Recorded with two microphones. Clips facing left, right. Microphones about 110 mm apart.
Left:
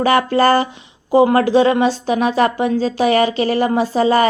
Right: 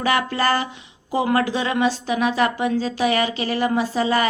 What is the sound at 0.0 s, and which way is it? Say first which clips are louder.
A woman's voice: left 7 dB; 35° left (ahead or behind).